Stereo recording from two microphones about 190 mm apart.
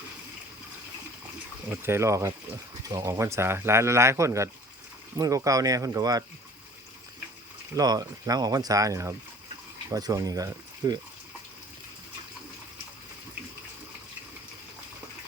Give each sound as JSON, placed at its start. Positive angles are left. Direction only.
{"t": 1.7, "sound": "speech", "side_deg": -10}
{"t": 7.8, "sound": "speech", "side_deg": -20}